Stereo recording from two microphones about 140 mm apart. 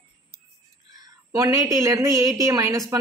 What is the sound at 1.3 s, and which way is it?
Speech, 20° right (ahead or behind).